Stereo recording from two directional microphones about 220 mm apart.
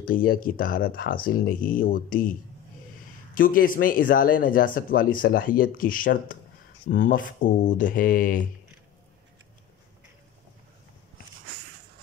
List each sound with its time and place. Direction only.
0.0 s speech: 40° left (ahead or behind)
3.3 s speech: 40° left (ahead or behind)